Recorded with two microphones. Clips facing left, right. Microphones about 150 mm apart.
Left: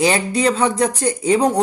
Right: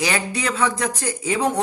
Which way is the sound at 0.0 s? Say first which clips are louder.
Left 7 dB; 35° left (ahead or behind).